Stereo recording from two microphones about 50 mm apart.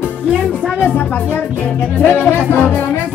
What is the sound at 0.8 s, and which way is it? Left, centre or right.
Music, left.